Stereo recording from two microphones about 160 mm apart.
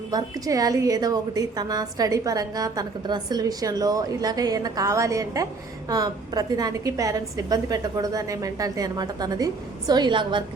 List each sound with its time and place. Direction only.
0.1 s a woman's voice: 20° right (ahead or behind)